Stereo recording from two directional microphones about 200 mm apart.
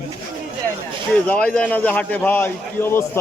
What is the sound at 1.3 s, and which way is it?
A man's voice, 5° left (ahead or behind).